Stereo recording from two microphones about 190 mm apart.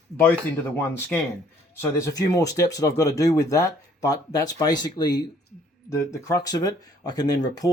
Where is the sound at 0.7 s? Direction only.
10° left (ahead or behind).